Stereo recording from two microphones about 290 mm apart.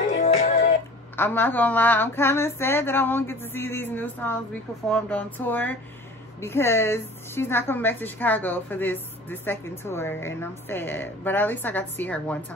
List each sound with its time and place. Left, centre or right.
0.0 s music: left
1.1 s a woman's voice: centre